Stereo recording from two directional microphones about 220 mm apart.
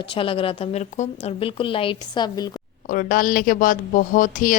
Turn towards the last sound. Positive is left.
turn(degrees=35)  # may be behind; listen again after turning